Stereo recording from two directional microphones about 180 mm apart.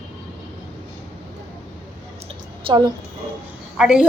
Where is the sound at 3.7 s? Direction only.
5° right (ahead or behind).